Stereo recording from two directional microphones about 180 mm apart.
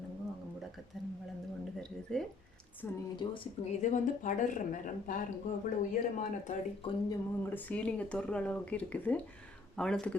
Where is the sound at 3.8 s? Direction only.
45° left (ahead or behind).